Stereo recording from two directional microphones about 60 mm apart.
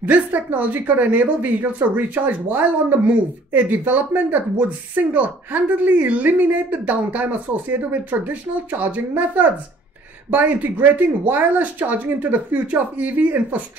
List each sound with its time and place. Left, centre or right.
0.0 s a woman's voice: right